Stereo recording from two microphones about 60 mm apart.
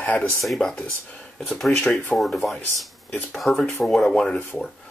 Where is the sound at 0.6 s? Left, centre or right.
Centre.